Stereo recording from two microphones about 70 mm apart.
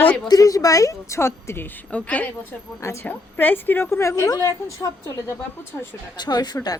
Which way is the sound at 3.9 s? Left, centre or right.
Left.